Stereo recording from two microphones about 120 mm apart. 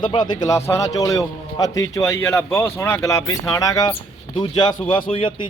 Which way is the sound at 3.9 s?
45° left (ahead or behind).